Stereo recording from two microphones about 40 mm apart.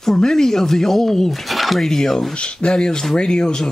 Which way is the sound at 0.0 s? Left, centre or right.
Centre.